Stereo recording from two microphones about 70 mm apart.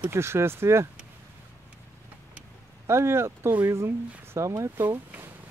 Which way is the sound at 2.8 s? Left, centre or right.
Right.